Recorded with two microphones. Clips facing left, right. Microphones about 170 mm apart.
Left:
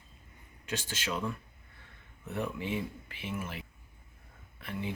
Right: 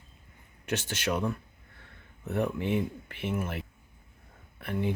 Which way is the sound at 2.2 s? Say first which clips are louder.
Right 6 dB; 55° right (ahead or behind).